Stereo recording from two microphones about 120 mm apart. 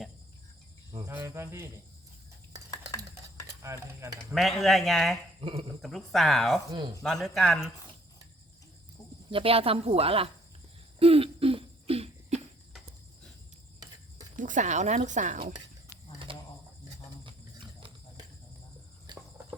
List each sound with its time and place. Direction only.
1.0 s speech: 20° right (ahead or behind)
3.6 s stir: 25° right (ahead or behind)
4.4 s a man's voice: centre (ahead or behind)
5.4 s speech: 50° right (ahead or behind)
5.8 s a man's voice: centre (ahead or behind)
9.3 s speech: 50° right (ahead or behind)
11.0 s cough: 50° right (ahead or behind)
14.3 s a woman's voice: 90° right
16.1 s insect: 45° right (ahead or behind)
17.2 s a sound: 45° right (ahead or behind)
19.1 s cricket: 40° right (ahead or behind)